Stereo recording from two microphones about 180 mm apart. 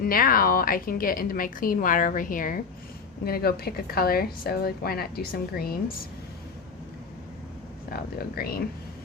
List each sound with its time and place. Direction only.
0.0 s a woman's voice: 55° left (ahead or behind)
7.9 s a woman's voice: 55° left (ahead or behind)